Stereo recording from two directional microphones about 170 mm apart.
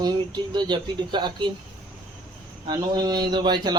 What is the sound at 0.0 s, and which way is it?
A man's voice, 25° right (ahead or behind).